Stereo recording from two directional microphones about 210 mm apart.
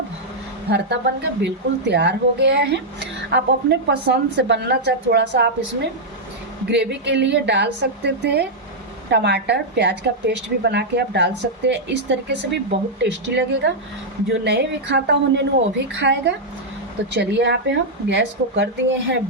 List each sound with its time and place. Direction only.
0.7 s a woman's voice: 55° right (ahead or behind)
6.7 s a woman's voice: 55° right (ahead or behind)